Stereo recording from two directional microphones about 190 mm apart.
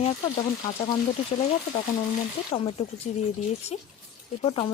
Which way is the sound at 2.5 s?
30° left (ahead or behind).